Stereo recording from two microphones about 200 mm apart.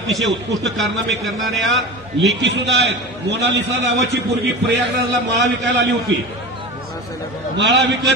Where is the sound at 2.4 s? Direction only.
60° right (ahead or behind).